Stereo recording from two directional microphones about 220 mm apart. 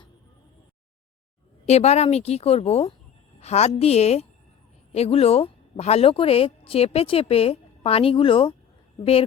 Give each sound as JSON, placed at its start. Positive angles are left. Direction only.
{"t": 1.6, "sound": "a woman's voice", "side_deg": 30}